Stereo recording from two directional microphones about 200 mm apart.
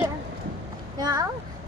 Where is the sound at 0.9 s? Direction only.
20° right (ahead or behind).